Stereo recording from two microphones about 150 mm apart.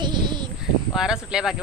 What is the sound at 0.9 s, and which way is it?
Speech, 5° right (ahead or behind).